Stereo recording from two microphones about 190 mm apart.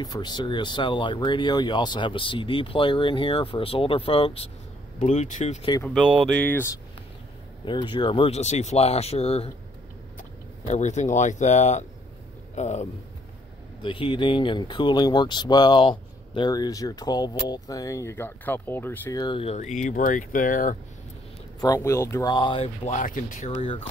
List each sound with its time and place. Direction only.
0.0 s speech: 20° left (ahead or behind); by 5.7 s 35° left (ahead or behind)
5.9 s speech: centre (ahead or behind)
7.6 s speech: 25° left (ahead or behind)
10.7 s speech: 40° left (ahead or behind)
13.8 s speech: 25° left (ahead or behind); by 20.7 s 45° left (ahead or behind)
21.5 s speech: 20° left (ahead or behind)
22.8 s speech: 40° left (ahead or behind)